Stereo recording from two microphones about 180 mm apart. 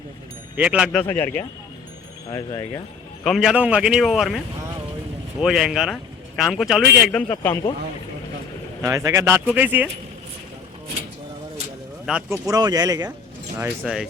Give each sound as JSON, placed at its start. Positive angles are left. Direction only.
{"t": 0.5, "sound": "speech", "side_deg": -5}
{"t": 0.9, "sound": "speech", "side_deg": 10}
{"t": 3.2, "sound": "a man's voice", "side_deg": 0}
{"t": 5.4, "sound": "a man's voice", "side_deg": -5}
{"t": 7.3, "sound": "speech", "side_deg": 15}
{"t": 8.8, "sound": "speech", "side_deg": -20}
{"t": 12.3, "sound": "speech", "side_deg": -20}